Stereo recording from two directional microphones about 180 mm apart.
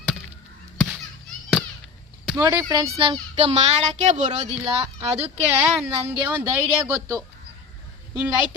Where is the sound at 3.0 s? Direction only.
30° right (ahead or behind).